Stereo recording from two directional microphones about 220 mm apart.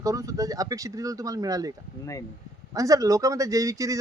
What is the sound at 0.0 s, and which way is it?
A man's voice, 15° right (ahead or behind).